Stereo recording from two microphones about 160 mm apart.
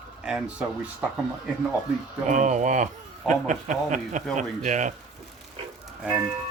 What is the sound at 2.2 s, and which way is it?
Speech, 50° right (ahead or behind).